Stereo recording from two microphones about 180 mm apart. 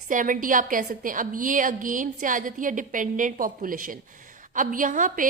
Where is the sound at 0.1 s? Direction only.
45° right (ahead or behind).